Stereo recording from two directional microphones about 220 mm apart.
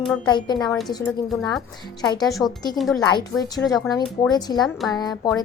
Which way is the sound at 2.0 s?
20° left (ahead or behind).